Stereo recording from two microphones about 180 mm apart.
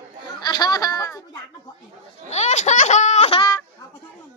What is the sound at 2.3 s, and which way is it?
Laughter, 40° left (ahead or behind).